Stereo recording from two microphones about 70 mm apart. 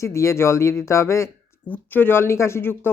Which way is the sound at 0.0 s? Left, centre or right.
Left.